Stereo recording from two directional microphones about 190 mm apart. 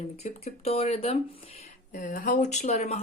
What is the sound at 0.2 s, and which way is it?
Speech, 35° left (ahead or behind).